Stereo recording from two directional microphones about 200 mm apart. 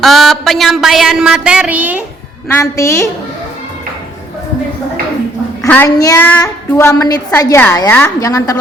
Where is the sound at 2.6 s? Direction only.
15° left (ahead or behind).